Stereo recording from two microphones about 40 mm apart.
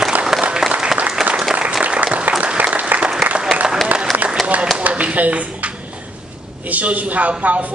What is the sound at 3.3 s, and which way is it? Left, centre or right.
Applause, centre.